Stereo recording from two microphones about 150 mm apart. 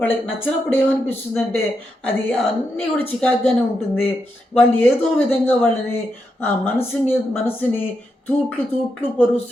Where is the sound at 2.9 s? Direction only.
10° left (ahead or behind).